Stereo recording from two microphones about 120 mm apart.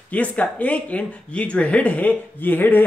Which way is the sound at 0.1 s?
10° left (ahead or behind).